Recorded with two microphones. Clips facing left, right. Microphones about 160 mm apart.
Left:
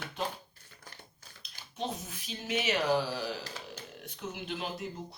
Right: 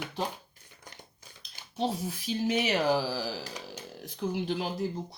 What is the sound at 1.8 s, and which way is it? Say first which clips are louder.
Speech: right 6 dB; 35° right (ahead or behind).